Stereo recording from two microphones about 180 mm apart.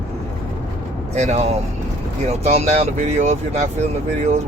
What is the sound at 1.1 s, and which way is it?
Speech, 40° right (ahead or behind).